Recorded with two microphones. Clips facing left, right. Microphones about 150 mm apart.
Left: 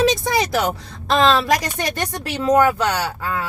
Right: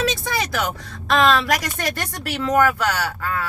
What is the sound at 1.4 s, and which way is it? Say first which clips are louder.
Speech: left 3 dB; 20° left (ahead or behind).